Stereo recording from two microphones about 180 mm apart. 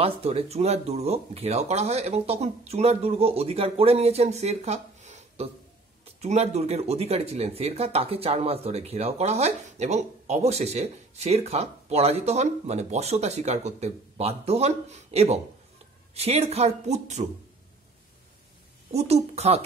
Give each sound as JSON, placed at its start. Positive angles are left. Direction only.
{"t": 0.0, "sound": "speech", "side_deg": -35}
{"t": 18.9, "sound": "speech", "side_deg": -35}